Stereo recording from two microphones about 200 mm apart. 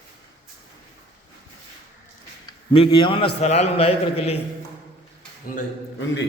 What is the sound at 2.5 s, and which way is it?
A man's voice, 25° left (ahead or behind).